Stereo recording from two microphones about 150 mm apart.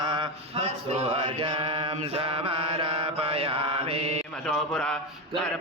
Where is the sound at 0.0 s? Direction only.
30° right (ahead or behind).